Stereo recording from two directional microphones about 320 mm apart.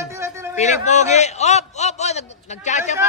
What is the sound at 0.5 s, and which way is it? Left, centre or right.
A man's voice, left.